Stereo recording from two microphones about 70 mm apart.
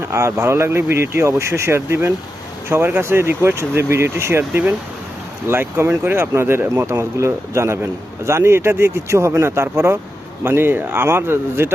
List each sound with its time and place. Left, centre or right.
0.1 s speech: right